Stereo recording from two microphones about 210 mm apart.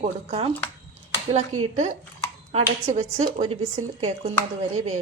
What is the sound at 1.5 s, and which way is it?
Speech, 90° right.